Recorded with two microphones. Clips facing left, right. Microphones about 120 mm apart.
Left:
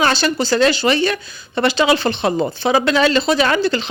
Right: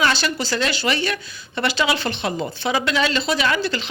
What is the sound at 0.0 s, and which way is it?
Speech, 30° left (ahead or behind).